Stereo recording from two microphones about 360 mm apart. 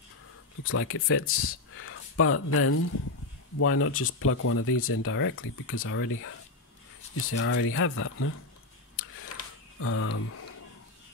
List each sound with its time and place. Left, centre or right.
0.7 s speech: left
9.8 s speech: left